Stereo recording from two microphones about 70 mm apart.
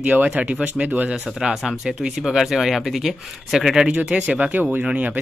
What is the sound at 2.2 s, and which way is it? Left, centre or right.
Speech, centre.